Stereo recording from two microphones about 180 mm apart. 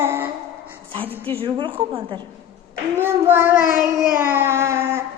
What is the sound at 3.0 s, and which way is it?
A child's voice, 10° right (ahead or behind).